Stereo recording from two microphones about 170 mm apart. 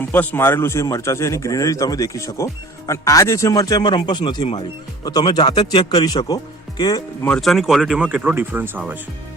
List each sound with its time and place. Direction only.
0.0 s speech: 10° left (ahead or behind)
7.3 s speech: 5° left (ahead or behind)